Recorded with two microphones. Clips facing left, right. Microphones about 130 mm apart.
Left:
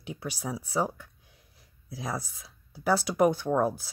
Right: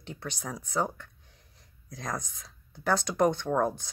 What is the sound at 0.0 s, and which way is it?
Speech, 10° left (ahead or behind).